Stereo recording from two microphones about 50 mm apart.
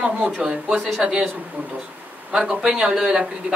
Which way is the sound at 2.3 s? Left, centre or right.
Centre.